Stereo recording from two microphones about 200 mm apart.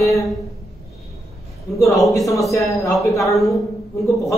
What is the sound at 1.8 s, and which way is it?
A man's voice, centre (ahead or behind).